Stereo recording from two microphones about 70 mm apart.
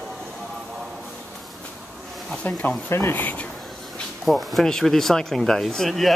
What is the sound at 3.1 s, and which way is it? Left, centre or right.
Speech, left.